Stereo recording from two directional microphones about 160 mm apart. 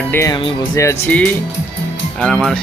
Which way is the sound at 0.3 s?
30° left (ahead or behind).